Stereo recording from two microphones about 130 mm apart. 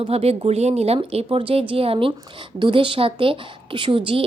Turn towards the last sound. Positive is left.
turn(degrees=-45)  # may be behind; listen again after turning